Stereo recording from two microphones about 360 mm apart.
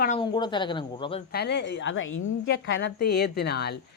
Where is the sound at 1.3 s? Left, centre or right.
Left.